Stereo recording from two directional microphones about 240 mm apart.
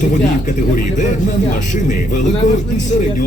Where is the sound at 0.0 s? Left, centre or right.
Left.